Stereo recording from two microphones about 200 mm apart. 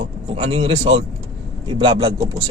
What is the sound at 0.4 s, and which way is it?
Speech, 25° right (ahead or behind).